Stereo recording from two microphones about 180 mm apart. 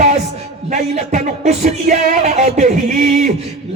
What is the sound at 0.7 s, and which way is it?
Music, 40° right (ahead or behind).